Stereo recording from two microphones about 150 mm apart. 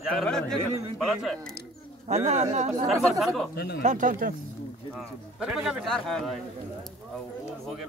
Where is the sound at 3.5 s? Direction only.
90° left.